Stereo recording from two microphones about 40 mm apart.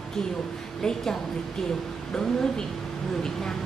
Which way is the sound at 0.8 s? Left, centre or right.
Centre.